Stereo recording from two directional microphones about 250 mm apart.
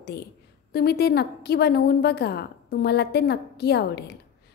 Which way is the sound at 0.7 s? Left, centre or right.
Left.